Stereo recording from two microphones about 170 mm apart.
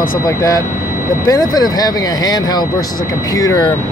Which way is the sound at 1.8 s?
25° left (ahead or behind).